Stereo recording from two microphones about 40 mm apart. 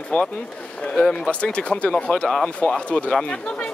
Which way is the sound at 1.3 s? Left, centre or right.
Left.